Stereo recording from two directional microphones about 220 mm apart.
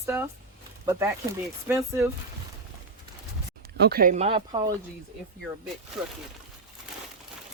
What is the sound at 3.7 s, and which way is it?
Speech, 45° right (ahead or behind).